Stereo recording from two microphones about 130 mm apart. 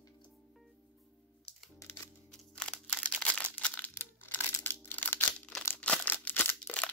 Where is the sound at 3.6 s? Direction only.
15° left (ahead or behind).